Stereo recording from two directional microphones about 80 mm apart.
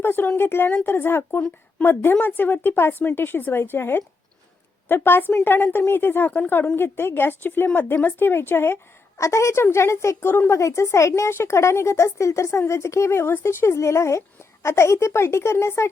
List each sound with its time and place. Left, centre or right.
0.0 s a woman's voice: left